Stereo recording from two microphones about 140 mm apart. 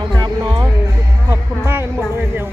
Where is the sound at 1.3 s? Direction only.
15° right (ahead or behind).